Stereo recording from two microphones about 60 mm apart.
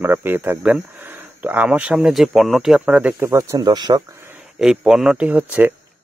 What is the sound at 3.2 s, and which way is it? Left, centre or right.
Speech, right.